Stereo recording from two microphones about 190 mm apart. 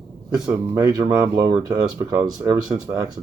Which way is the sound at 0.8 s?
20° right (ahead or behind).